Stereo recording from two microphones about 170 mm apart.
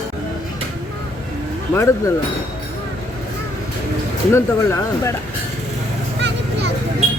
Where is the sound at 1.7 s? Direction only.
15° left (ahead or behind).